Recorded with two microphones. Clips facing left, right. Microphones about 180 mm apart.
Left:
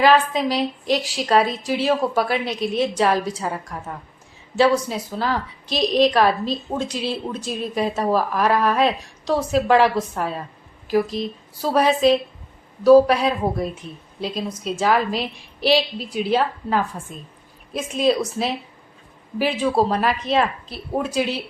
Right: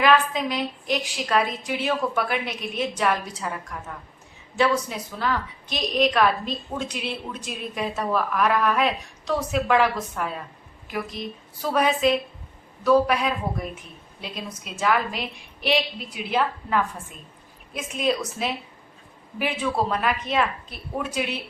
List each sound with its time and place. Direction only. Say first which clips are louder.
0.0 s a woman's voice: left 4 dB; 35° left (ahead or behind)